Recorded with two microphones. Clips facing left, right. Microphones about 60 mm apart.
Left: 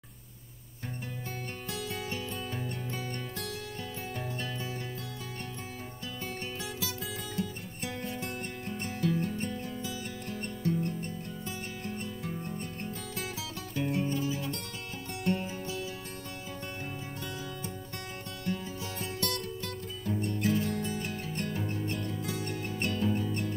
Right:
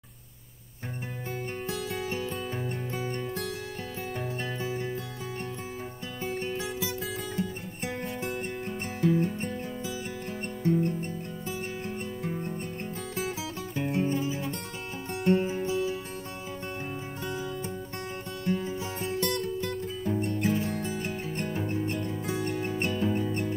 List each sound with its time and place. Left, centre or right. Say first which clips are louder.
1.7 s music: right 3 dB; centre
2.0 s music: right 4 dB; right
4.2 s music: right 4 dB; centre
6.2 s music: right 8 dB; centre
8.1 s music: right 4 dB; centre
10.4 s music: right 6 dB; right
18.6 s music: right 5 dB; right